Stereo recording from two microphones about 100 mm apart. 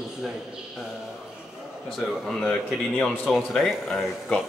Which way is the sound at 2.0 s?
5° left (ahead or behind).